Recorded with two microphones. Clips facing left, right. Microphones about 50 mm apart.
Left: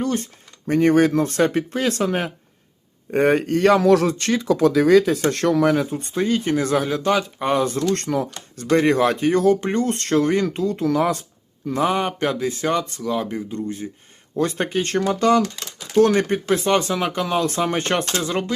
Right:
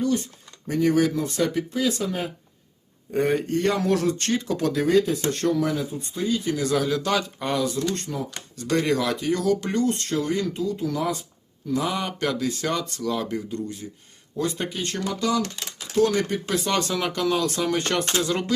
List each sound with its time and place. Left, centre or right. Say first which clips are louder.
0.0 s speech: left 1 dB; left
5.3 s speech: left 7 dB; left
7.5 s speech: left 5 dB; left
7.8 s speech: left 6 dB; left
8.7 s speech: left 6 dB; left
9.8 s speech: left 5 dB; left
11.7 s speech: left 5 dB; left
14.3 s speech: left 6 dB; left